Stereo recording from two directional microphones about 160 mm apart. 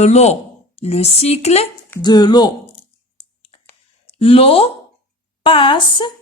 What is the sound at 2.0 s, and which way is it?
Speech, 25° left (ahead or behind).